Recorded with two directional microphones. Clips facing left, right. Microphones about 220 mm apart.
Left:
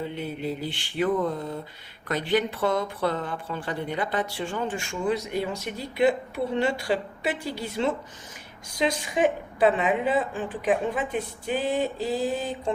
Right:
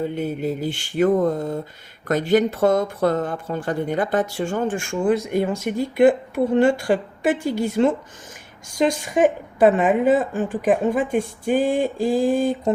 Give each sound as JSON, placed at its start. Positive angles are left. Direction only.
{"t": 0.0, "sound": "speech", "side_deg": -45}